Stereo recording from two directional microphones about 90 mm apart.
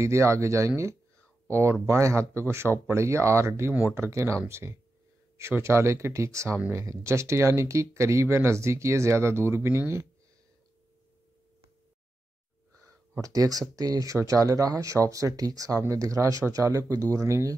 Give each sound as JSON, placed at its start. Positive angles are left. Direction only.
{"t": 0.0, "sound": "speech", "side_deg": -35}
{"t": 13.2, "sound": "speech", "side_deg": -40}